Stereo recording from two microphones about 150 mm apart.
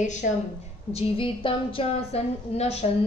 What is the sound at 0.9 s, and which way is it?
A woman's voice, 40° left (ahead or behind).